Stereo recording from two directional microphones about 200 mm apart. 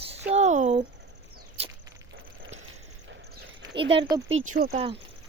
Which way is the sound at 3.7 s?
25° right (ahead or behind).